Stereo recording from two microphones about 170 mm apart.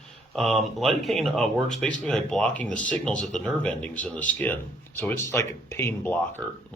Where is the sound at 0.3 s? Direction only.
Centre (ahead or behind).